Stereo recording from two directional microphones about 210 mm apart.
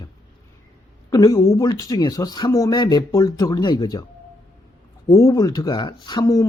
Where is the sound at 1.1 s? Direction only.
15° left (ahead or behind).